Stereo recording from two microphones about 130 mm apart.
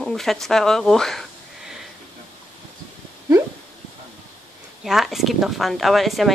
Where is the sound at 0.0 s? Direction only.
5° left (ahead or behind).